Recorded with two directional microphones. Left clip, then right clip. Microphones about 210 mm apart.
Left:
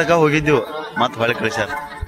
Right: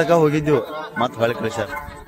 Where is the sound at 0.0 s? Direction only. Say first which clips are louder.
Left 1 dB; 5° left (ahead or behind).